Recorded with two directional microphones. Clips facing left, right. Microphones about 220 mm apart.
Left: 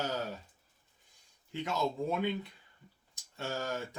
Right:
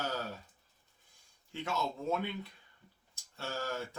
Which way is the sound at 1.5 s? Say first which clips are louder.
Left 4 dB; 15° left (ahead or behind).